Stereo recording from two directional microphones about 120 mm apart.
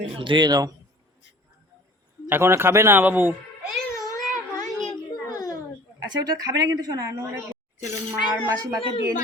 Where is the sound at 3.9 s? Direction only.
30° left (ahead or behind).